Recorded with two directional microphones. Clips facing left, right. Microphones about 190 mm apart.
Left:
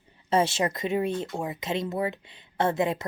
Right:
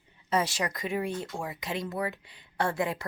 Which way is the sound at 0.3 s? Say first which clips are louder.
Left 5 dB; 25° left (ahead or behind).